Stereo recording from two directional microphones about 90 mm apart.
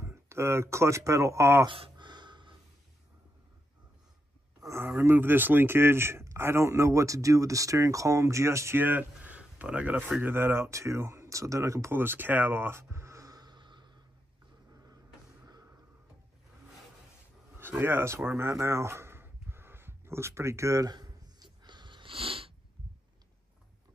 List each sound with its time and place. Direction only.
0.0 s speech: 30° right (ahead or behind)
1.7 s a sound: 65° right (ahead or behind)
4.6 s speech: 30° right (ahead or behind); by 13.9 s 60° right (ahead or behind)
17.6 s speech: 25° right (ahead or behind)
20.9 s sniff: 50° right (ahead or behind); by 22.5 s 90° right